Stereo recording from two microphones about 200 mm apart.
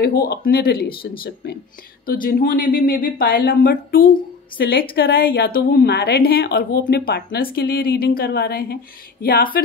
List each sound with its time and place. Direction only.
0.0 s a woman's voice: 50° left (ahead or behind)